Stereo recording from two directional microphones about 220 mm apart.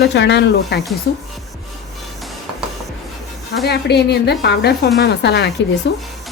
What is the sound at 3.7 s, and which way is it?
Speech, 50° left (ahead or behind).